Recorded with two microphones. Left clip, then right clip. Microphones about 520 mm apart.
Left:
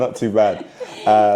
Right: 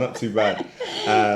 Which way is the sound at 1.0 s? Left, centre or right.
Left.